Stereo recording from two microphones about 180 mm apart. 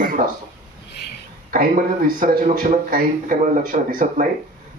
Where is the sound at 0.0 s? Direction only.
50° right (ahead or behind).